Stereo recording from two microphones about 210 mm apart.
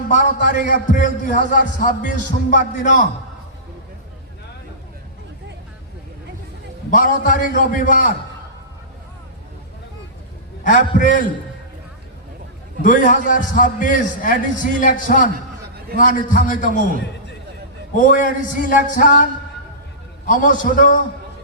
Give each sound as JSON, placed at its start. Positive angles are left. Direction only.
{"t": 0.1, "sound": "a man's voice", "side_deg": 40}
{"t": 6.9, "sound": "a man's voice", "side_deg": 40}
{"t": 10.6, "sound": "a man's voice", "side_deg": 40}
{"t": 12.8, "sound": "a man's voice", "side_deg": 40}
{"t": 17.9, "sound": "a man's voice", "side_deg": 40}
{"t": 20.2, "sound": "a man's voice", "side_deg": 40}